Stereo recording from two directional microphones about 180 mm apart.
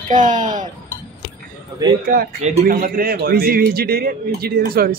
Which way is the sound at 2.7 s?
50° right (ahead or behind).